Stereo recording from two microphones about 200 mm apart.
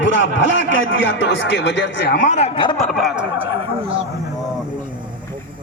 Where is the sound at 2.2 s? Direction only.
35° left (ahead or behind).